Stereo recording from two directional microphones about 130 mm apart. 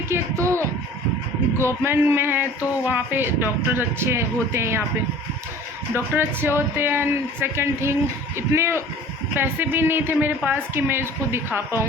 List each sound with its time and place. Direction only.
0.1 s a child's voice: 20° right (ahead or behind)
5.9 s a woman's voice: 15° right (ahead or behind)